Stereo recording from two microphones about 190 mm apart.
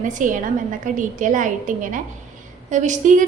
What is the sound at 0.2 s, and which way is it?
A woman's voice, 45° right (ahead or behind).